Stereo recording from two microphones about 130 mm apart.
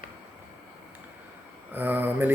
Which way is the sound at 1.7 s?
15° right (ahead or behind).